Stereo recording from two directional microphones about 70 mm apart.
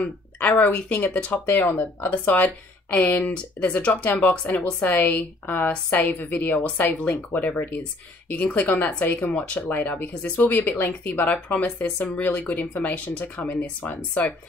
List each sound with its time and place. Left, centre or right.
0.0 s speech: left